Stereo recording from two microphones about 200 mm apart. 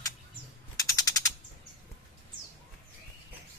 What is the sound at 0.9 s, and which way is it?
Mechanisms, 20° left (ahead or behind).